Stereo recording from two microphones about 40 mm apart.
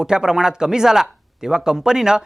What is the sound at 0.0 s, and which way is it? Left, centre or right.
Speech, centre.